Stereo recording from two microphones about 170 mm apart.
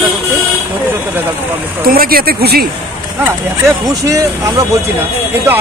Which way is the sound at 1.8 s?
60° right (ahead or behind).